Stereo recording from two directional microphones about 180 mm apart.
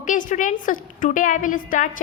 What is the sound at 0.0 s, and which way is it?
A woman's voice, 45° left (ahead or behind).